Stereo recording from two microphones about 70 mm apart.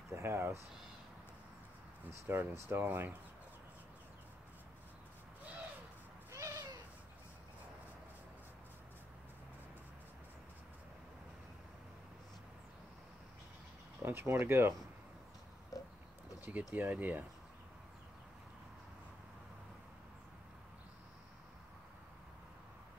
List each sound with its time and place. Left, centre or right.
0.1 s speech: right
2.2 s speech: right
6.3 s a sound: right
14.0 s speech: right
15.7 s oink: left
16.3 s speech: right